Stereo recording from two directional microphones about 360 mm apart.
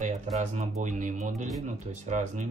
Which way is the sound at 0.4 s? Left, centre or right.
Centre.